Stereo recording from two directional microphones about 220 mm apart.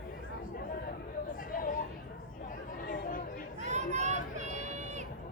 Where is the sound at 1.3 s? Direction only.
40° left (ahead or behind).